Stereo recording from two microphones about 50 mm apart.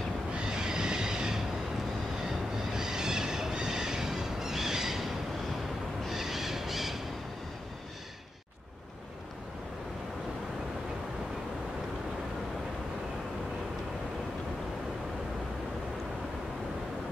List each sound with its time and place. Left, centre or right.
0.5 s train: centre
2.7 s a sound: centre
6.0 s owl: centre